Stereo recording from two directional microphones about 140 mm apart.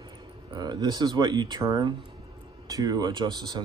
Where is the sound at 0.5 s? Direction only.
30° right (ahead or behind).